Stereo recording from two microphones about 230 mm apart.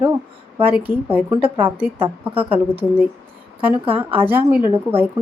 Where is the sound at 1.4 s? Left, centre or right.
Right.